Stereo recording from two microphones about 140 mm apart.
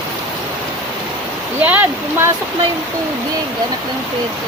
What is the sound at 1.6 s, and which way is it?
Speech, 10° right (ahead or behind).